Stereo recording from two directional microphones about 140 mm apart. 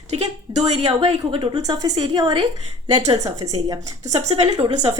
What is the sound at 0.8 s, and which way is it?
A woman's voice, 45° right (ahead or behind).